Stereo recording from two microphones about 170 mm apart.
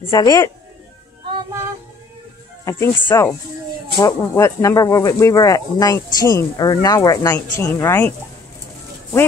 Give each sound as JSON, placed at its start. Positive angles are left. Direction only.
{"t": 0.1, "sound": "speech", "side_deg": 20}
{"t": 2.6, "sound": "speech", "side_deg": 15}